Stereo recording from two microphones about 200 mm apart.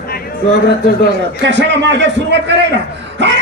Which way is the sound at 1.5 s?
65° right (ahead or behind).